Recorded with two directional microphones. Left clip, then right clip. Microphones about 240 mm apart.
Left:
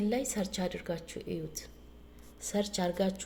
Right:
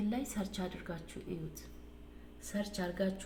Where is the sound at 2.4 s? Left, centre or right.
Left.